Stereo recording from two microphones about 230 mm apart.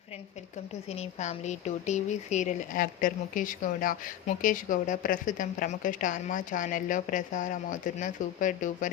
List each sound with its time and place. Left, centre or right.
0.9 s speech: left